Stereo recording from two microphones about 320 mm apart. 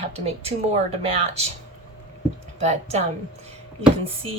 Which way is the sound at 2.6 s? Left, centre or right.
Right.